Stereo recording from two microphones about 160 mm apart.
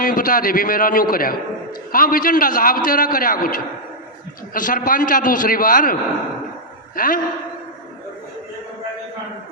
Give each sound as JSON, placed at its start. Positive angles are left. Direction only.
{"t": 0.0, "sound": "a man's voice", "side_deg": 60}